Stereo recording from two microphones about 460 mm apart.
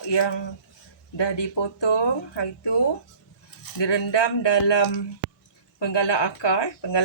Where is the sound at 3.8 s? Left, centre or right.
Left.